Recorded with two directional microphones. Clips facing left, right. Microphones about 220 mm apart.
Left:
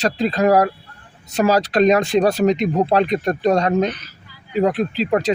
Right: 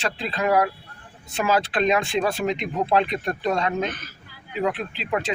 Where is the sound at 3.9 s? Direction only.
50° right (ahead or behind).